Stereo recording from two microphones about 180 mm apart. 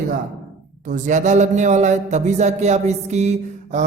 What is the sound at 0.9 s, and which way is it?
Speech, 45° right (ahead or behind).